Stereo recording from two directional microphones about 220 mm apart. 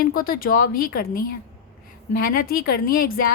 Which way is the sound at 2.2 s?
40° left (ahead or behind).